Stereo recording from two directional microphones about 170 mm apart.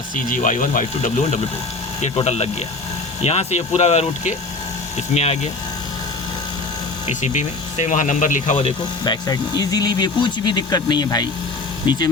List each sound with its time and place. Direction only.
0.3 s speech: 50° left (ahead or behind)
2.0 s speech: 40° left (ahead or behind)
7.1 s speech: 45° left (ahead or behind)
9.0 s speech: 25° left (ahead or behind)